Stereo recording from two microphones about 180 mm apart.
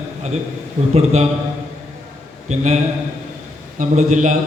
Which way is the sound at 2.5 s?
40° right (ahead or behind).